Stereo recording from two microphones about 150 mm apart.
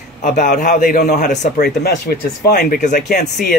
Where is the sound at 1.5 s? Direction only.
90° left.